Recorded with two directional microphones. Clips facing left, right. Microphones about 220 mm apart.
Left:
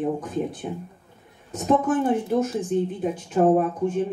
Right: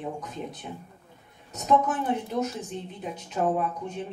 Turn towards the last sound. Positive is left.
turn(degrees=50)  # may be behind; listen again after turning